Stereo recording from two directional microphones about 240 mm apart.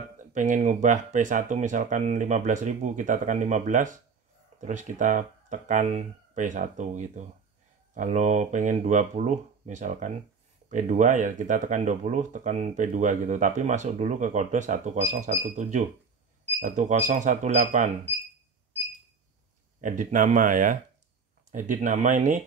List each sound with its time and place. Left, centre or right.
0.3 s speech: right
19.8 s speech: right